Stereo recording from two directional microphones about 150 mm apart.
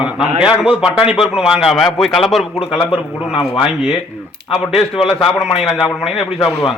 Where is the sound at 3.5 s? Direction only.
5° right (ahead or behind).